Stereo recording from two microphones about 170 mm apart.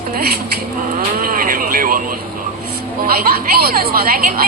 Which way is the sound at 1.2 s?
55° right (ahead or behind).